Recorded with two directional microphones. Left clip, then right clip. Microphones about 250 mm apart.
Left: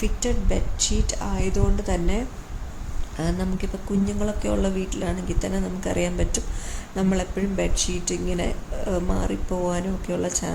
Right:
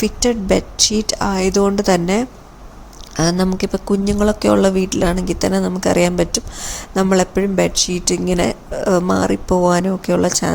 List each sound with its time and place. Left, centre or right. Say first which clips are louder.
0.0 s speech: right 10 dB; right